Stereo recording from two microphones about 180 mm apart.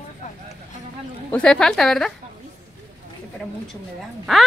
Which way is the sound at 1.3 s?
5° left (ahead or behind).